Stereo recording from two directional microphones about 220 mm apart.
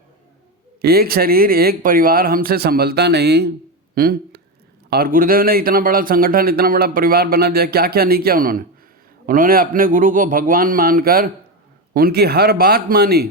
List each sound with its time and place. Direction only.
0.8 s a man's voice: 45° right (ahead or behind)